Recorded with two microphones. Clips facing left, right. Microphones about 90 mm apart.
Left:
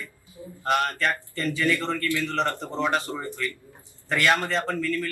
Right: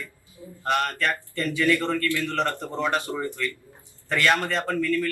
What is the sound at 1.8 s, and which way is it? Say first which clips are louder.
Speech: right 1 dB; 15° left (ahead or behind).